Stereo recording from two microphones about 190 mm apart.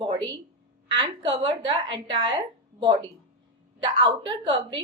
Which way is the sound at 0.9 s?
25° right (ahead or behind).